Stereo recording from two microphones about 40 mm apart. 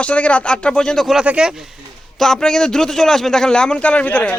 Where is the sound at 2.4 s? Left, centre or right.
Centre.